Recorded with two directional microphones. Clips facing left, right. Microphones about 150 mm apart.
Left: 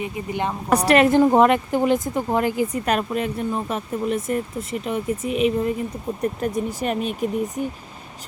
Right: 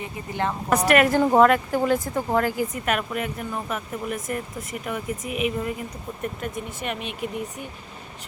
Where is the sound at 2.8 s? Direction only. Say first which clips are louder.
Left 4 dB; 30° left (ahead or behind).